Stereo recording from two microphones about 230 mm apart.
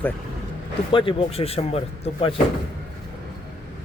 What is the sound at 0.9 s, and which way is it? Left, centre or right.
Speech, left.